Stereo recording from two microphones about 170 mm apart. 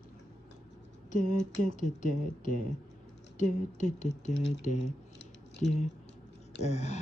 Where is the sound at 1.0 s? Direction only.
50° left (ahead or behind).